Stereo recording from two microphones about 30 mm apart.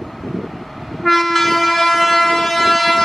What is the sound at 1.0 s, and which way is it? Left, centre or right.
Train, centre.